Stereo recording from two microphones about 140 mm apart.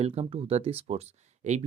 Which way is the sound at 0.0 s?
45° right (ahead or behind).